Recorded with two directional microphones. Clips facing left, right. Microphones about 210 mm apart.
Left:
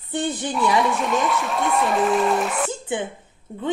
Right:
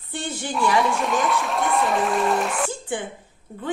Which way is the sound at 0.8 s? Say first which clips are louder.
Left 1 dB; centre (ahead or behind).